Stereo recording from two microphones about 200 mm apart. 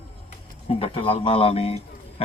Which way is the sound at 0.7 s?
30° left (ahead or behind).